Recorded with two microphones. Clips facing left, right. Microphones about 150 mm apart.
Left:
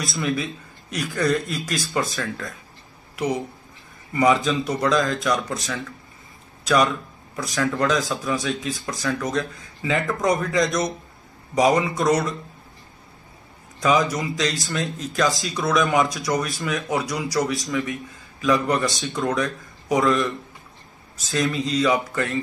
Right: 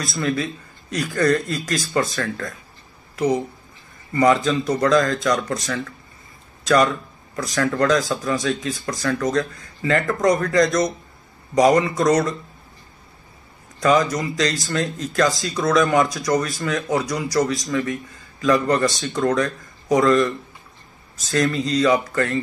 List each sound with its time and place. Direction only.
0.2 s a man's voice: 20° left (ahead or behind)
0.9 s speech: 5° left (ahead or behind)
4.1 s speech: 5° left (ahead or behind)
7.3 s speech: 5° left (ahead or behind)
13.7 s speech: centre (ahead or behind)
21.3 s speech: centre (ahead or behind)